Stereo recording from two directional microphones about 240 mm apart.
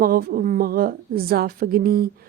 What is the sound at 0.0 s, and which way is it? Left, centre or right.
Speech, right.